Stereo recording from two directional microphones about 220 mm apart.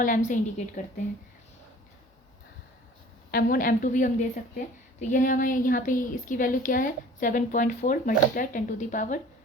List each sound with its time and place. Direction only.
0.0 s speech: 35° left (ahead or behind)
3.3 s speech: 40° left (ahead or behind)